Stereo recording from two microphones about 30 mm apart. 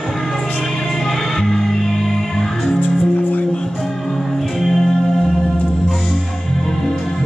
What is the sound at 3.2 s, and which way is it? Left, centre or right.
Music, left.